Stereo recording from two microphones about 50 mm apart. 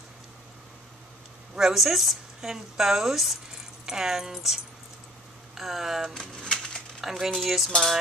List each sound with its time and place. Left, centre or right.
1.5 s a woman's voice: centre
6.4 s a sound: centre
7.0 s a woman's voice: centre